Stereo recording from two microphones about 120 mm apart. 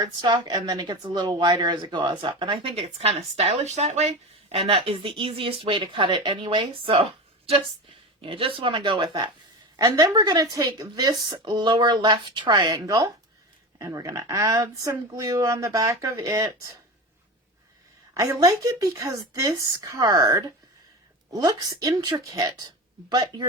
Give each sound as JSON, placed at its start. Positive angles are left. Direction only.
{"t": 0.0, "sound": "a woman's voice", "side_deg": -35}
{"t": 18.1, "sound": "a woman's voice", "side_deg": -30}